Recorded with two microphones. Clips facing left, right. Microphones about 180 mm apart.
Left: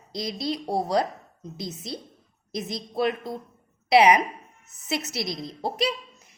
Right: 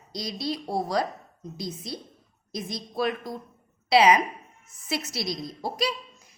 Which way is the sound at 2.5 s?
25° left (ahead or behind).